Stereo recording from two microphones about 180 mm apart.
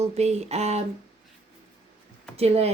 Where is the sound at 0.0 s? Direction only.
35° right (ahead or behind).